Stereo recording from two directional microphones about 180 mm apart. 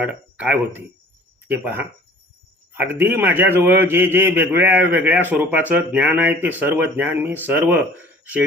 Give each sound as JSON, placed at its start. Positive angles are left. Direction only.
{"t": 0.0, "sound": "a man's voice", "side_deg": -10}